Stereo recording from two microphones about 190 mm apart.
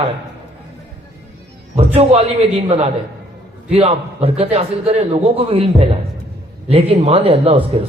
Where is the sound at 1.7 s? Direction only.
30° right (ahead or behind).